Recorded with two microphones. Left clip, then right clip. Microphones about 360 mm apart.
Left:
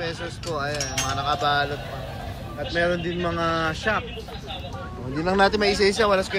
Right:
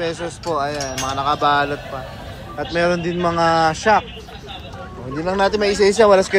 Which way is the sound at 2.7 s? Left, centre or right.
Centre.